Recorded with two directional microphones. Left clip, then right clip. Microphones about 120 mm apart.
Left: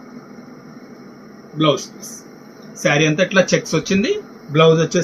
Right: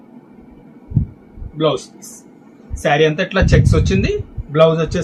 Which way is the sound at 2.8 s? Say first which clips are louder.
Right 1 dB; 90° right.